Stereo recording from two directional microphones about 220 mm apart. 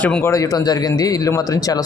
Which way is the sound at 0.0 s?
10° left (ahead or behind).